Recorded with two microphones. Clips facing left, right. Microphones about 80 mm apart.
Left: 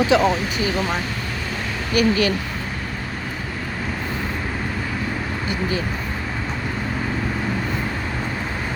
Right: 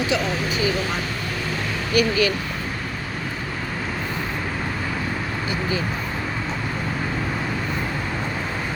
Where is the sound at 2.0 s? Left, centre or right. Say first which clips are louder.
Left 2 dB; left.